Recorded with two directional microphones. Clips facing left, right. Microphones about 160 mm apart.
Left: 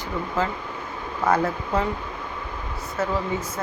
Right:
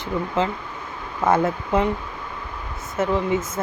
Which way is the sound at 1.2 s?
25° right (ahead or behind).